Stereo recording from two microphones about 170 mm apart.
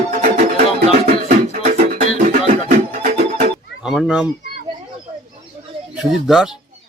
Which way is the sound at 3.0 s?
45° right (ahead or behind).